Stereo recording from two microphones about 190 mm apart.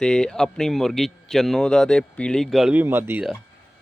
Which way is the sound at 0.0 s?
5° left (ahead or behind).